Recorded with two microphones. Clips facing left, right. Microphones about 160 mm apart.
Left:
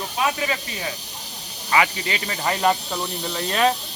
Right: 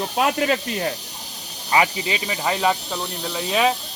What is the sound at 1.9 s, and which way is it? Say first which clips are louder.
Speech: right 2 dB; 15° right (ahead or behind).